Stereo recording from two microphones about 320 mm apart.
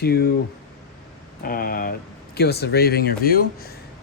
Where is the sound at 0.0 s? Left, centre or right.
Left.